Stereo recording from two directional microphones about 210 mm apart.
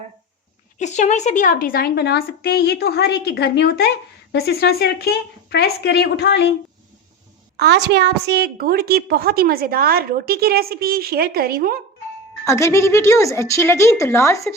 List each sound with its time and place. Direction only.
0.8 s a woman's voice: 35° left (ahead or behind); by 6.5 s 55° left (ahead or behind)
7.5 s a woman's voice: 50° right (ahead or behind)
12.5 s a woman's voice: 15° left (ahead or behind)